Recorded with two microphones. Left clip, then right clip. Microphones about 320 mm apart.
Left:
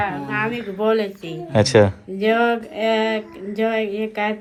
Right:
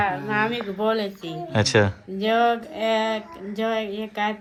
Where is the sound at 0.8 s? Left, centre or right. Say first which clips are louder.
Left 5 dB; centre.